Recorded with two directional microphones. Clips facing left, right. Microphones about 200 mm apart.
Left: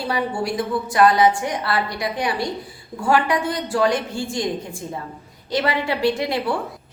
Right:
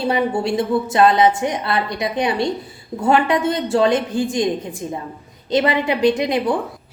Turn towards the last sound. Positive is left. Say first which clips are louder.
# right 4 dB
turn(degrees=-20)  # may be behind; listen again after turning